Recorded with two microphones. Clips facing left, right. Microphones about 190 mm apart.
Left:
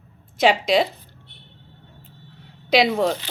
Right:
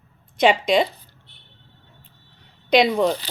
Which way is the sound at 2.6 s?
5° left (ahead or behind).